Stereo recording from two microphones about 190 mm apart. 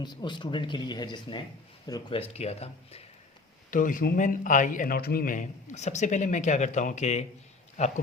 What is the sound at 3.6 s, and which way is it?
A man's voice, 45° left (ahead or behind).